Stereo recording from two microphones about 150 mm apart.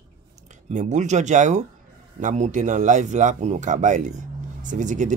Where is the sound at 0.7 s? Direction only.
55° right (ahead or behind).